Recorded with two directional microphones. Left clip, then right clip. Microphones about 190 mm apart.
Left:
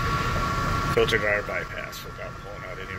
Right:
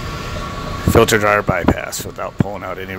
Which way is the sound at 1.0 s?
45° right (ahead or behind).